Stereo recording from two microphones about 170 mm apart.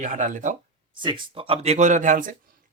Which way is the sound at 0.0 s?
50° right (ahead or behind).